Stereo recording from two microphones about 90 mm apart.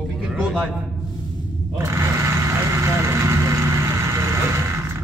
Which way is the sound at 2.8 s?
30° right (ahead or behind).